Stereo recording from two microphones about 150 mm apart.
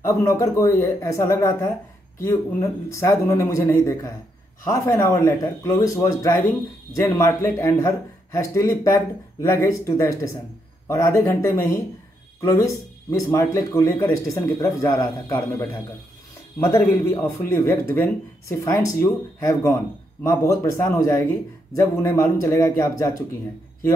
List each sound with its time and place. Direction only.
0.0 s a man's voice: 20° left (ahead or behind)